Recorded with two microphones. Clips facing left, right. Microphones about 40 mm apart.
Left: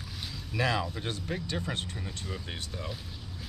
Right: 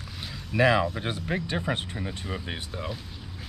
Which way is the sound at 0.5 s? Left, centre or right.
Right.